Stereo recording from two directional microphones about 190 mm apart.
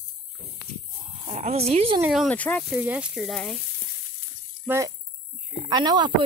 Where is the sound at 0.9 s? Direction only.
35° right (ahead or behind).